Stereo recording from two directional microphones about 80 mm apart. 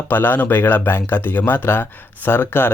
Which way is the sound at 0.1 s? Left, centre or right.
Left.